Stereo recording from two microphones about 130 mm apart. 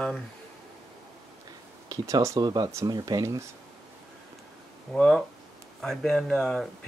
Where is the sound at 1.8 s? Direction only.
25° right (ahead or behind).